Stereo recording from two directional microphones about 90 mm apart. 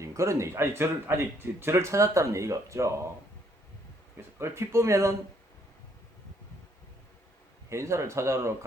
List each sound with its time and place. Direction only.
0.0 s speech: 35° right (ahead or behind)
4.4 s speech: 30° right (ahead or behind)
7.7 s speech: 30° right (ahead or behind)